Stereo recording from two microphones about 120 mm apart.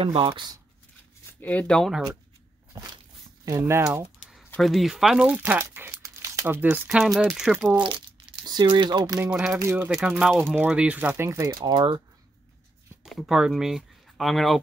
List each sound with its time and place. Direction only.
0.0 s speech: 50° right (ahead or behind)
0.3 s speech: 35° right (ahead or behind)
1.4 s speech: 10° left (ahead or behind)
2.7 s speech: 25° right (ahead or behind)
4.6 s speech: centre (ahead or behind)
8.5 s speech: 35° right (ahead or behind)
9.2 s speech: 5° right (ahead or behind)
9.6 s speech: 20° right (ahead or behind)
9.9 s speech: 5° right (ahead or behind)
10.4 s speech: 15° right (ahead or behind)
11.6 s speech: 40° right (ahead or behind)
13.0 s speech: centre (ahead or behind)